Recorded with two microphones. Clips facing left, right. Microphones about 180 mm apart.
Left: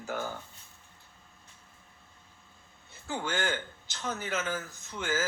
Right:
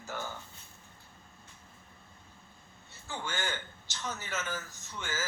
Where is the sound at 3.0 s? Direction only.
55° left (ahead or behind).